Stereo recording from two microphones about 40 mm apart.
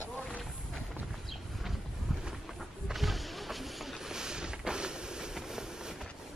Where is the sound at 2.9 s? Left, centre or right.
Centre.